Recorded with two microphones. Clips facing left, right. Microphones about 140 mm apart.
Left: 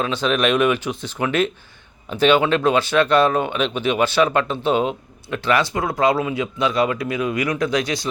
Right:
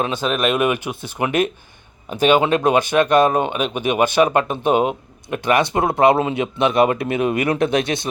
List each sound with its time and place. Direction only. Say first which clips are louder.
0.0 s speech: even; 10° right (ahead or behind)
4.5 s speech: right 2 dB; 50° right (ahead or behind)
5.5 s speech: right 6 dB; 25° right (ahead or behind)
7.6 s speech: right 2 dB; 55° right (ahead or behind)